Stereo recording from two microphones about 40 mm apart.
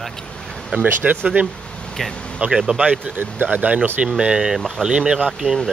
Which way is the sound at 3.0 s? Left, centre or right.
Right.